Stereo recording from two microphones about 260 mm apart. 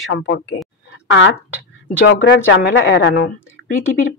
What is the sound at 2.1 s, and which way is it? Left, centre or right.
Speech, left.